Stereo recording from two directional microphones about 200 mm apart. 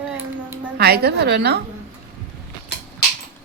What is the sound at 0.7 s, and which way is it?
Speech, 50° right (ahead or behind).